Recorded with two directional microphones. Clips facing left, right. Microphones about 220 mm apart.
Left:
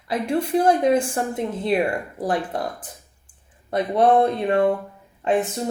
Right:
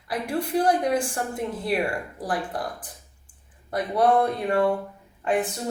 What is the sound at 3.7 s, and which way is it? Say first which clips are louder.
A woman's voice: left 3 dB; 20° left (ahead or behind).